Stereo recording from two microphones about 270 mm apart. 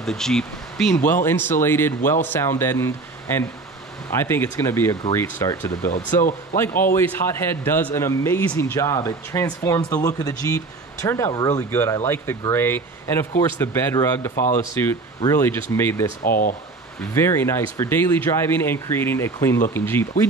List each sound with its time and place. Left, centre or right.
0.0 s speech: centre
14.3 s speech: left
14.8 s speech: centre
16.3 s speech: left
17.1 s speech: centre